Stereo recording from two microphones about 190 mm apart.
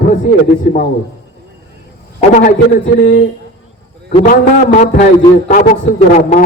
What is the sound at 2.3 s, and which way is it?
Speech, 45° left (ahead or behind).